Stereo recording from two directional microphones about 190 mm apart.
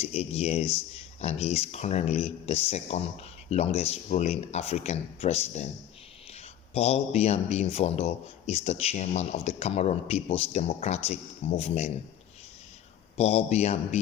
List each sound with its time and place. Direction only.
0.0 s speech: 35° left (ahead or behind)
13.1 s speech: 35° left (ahead or behind)